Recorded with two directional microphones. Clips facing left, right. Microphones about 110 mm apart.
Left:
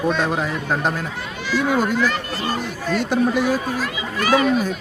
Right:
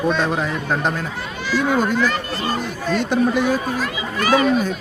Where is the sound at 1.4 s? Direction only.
35° right (ahead or behind).